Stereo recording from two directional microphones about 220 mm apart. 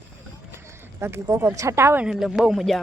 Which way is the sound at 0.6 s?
10° right (ahead or behind).